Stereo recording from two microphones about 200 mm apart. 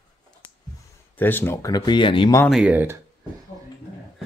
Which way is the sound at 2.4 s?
5° right (ahead or behind).